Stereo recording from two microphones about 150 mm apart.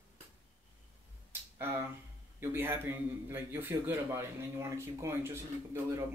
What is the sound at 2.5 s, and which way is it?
A man's voice, 15° right (ahead or behind).